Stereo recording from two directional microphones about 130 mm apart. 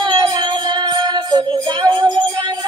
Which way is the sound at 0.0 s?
30° right (ahead or behind).